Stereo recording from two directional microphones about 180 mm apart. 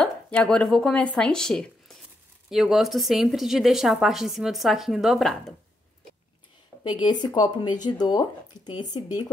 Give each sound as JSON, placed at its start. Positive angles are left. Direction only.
{"t": 0.0, "sound": "a woman's voice", "side_deg": 5}
{"t": 6.9, "sound": "speech", "side_deg": 25}